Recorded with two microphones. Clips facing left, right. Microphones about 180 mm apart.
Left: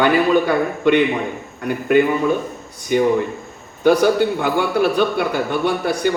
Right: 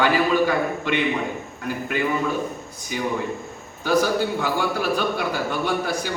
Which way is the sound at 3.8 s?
60° left (ahead or behind).